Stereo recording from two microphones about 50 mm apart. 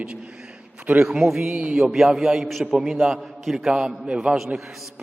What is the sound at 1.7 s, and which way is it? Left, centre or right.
A man's voice, centre.